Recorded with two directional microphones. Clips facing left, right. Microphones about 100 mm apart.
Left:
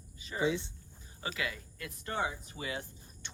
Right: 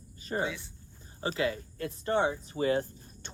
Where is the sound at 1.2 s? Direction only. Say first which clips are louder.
Right 8 dB; 35° right (ahead or behind).